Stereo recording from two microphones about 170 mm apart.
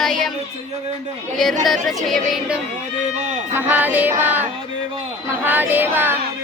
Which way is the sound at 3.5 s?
10° right (ahead or behind).